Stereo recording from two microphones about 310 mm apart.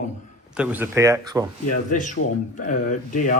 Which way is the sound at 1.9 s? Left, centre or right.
Left.